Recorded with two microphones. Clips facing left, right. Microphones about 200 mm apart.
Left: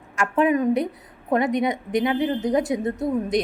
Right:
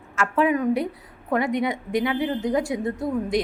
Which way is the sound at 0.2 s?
20° left (ahead or behind).